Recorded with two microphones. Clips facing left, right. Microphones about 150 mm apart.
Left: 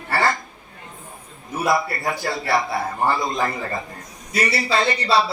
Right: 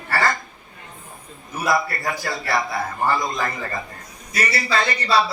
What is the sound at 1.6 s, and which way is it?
A man's voice, 25° left (ahead or behind).